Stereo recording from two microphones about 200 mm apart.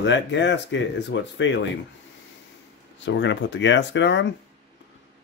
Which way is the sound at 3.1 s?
65° left (ahead or behind).